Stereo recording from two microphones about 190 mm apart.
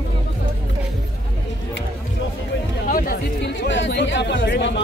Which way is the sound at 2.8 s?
50° left (ahead or behind).